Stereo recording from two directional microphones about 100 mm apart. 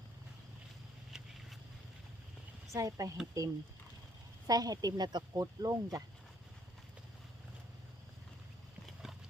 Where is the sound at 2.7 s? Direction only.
35° right (ahead or behind).